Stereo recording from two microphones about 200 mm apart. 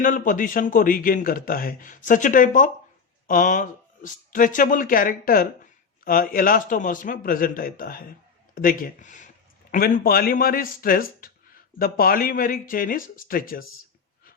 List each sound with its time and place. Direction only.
0.0 s speech: 40° left (ahead or behind)